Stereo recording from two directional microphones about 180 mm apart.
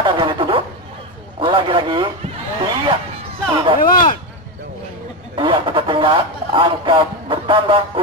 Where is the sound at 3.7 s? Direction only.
50° left (ahead or behind).